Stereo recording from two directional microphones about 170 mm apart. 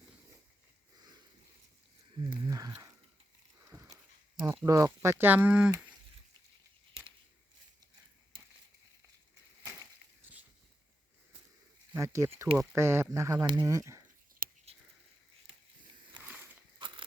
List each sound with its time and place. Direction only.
2.1 s speech: 25° right (ahead or behind)
4.4 s speech: 15° right (ahead or behind)
11.9 s speech: 15° right (ahead or behind)
14.4 s whispering: 55° right (ahead or behind)
16.1 s a sound: 10° right (ahead or behind)
16.7 s a sound: 30° right (ahead or behind)